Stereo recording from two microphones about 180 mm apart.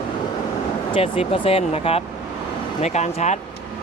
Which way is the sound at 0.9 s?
30° left (ahead or behind).